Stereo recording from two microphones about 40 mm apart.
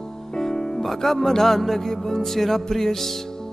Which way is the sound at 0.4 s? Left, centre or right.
Centre.